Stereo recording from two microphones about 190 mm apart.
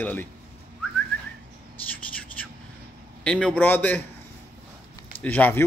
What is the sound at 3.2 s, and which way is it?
Speech, 5° left (ahead or behind).